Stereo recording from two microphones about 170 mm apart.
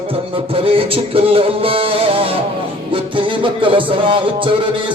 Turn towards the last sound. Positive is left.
turn(degrees=-30)  # may be behind; listen again after turning